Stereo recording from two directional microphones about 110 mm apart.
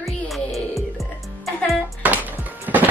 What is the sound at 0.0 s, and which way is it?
Music, centre (ahead or behind).